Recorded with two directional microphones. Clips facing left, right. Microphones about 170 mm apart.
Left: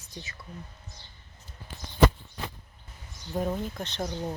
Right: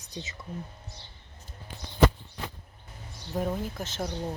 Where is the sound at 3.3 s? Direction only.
5° right (ahead or behind).